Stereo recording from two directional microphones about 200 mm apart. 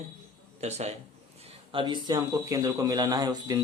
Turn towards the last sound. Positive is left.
turn(degrees=-20)  # may be behind; listen again after turning